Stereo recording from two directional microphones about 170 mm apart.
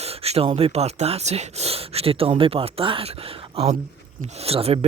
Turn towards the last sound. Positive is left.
turn(degrees=-35)  # may be behind; listen again after turning